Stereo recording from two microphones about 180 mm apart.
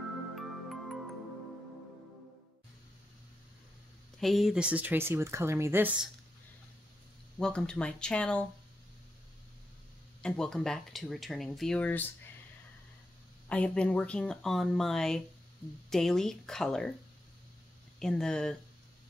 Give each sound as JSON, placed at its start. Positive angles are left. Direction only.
{"t": 0.4, "sound": "music", "side_deg": 0}
{"t": 4.2, "sound": "speech", "side_deg": 0}
{"t": 7.3, "sound": "speech", "side_deg": 5}
{"t": 10.2, "sound": "speech", "side_deg": 5}
{"t": 13.5, "sound": "speech", "side_deg": 5}
{"t": 17.9, "sound": "speech", "side_deg": 5}